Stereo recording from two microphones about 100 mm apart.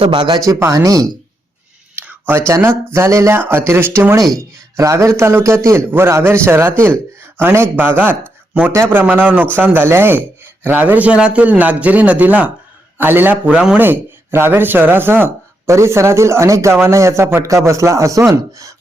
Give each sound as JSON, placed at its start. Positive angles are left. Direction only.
{"t": 0.0, "sound": "speech", "side_deg": -55}
{"t": 0.3, "sound": "speech", "side_deg": -35}
{"t": 2.0, "sound": "a sound", "side_deg": -20}
{"t": 2.5, "sound": "speech", "side_deg": -30}
{"t": 13.5, "sound": "speech", "side_deg": -5}
{"t": 13.7, "sound": "speech", "side_deg": -20}